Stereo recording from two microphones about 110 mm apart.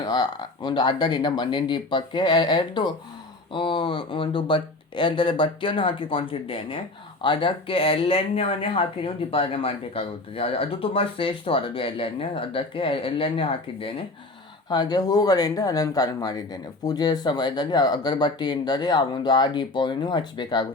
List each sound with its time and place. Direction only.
0.0 s speech: 40° left (ahead or behind); by 13.9 s 55° left (ahead or behind)
14.7 s speech: 40° left (ahead or behind)